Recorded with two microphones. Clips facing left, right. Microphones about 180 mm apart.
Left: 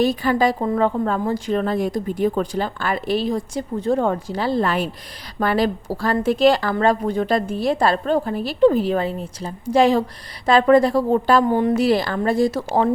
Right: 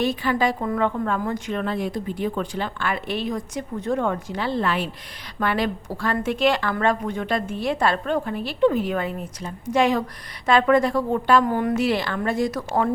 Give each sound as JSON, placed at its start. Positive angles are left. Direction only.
{"t": 0.0, "sound": "a woman's voice", "side_deg": 40}